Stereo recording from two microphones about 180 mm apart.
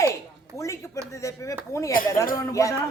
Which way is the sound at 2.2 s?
15° left (ahead or behind).